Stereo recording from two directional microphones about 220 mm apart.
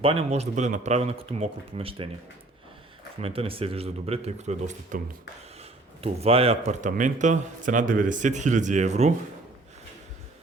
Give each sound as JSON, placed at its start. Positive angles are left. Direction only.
{"t": 0.0, "sound": "speech", "side_deg": -25}
{"t": 3.2, "sound": "speech", "side_deg": -25}
{"t": 6.0, "sound": "a man's voice", "side_deg": -25}